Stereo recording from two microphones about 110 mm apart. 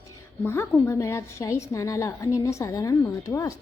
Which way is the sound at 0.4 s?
25° left (ahead or behind).